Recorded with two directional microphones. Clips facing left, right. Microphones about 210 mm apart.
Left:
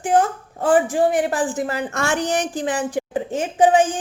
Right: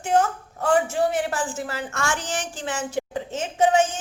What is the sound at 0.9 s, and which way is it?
A woman's voice, 15° left (ahead or behind).